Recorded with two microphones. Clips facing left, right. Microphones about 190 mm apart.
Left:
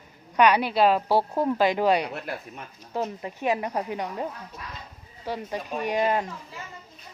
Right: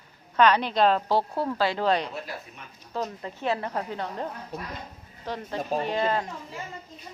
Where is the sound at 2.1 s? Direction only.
60° left (ahead or behind).